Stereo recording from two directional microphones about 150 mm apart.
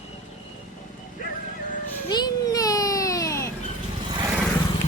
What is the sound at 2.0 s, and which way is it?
Children playing, 30° left (ahead or behind).